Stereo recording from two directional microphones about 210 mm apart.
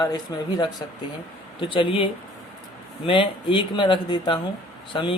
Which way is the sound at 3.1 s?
25° left (ahead or behind).